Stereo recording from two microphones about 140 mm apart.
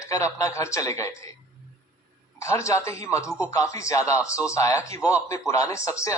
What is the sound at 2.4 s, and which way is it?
Speech, 20° left (ahead or behind).